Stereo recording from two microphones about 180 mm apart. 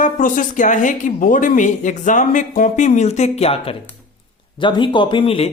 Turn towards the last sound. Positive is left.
turn(degrees=30)  # may be behind; listen again after turning